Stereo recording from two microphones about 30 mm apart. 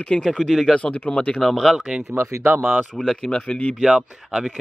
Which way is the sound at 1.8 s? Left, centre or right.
Right.